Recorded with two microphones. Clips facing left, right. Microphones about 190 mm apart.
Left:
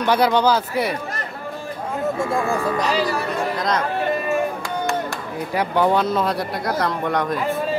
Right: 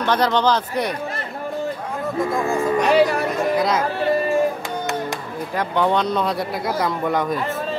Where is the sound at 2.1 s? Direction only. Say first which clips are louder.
Right 4 dB; 30° left (ahead or behind).